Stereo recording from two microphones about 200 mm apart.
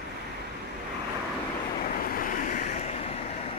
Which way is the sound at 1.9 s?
45° left (ahead or behind).